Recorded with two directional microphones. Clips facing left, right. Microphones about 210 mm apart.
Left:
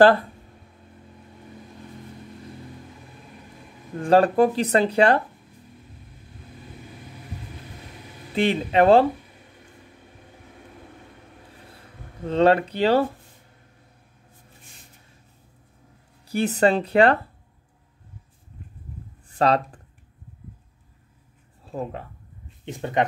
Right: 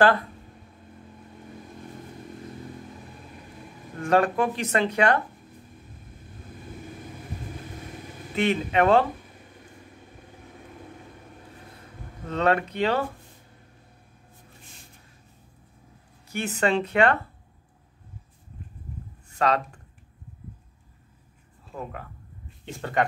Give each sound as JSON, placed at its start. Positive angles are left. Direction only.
{"t": 4.0, "sound": "speech", "side_deg": 35}
{"t": 8.4, "sound": "speech", "side_deg": 30}
{"t": 12.3, "sound": "speech", "side_deg": 30}
{"t": 16.3, "sound": "speech", "side_deg": 35}
{"t": 19.2, "sound": "a sound", "side_deg": 35}
{"t": 22.7, "sound": "speech", "side_deg": 20}